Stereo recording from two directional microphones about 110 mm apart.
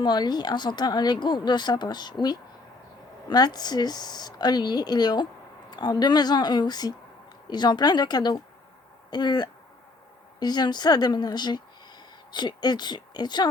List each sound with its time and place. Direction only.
0.0 s speech: 40° left (ahead or behind)